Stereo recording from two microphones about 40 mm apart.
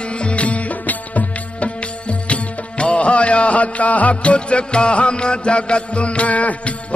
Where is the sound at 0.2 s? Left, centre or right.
Left.